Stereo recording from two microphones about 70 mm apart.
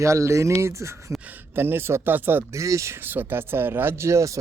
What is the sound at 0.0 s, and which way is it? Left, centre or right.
Speech, right.